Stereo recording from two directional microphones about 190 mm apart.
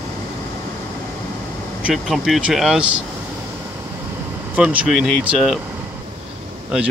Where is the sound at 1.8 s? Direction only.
5° right (ahead or behind).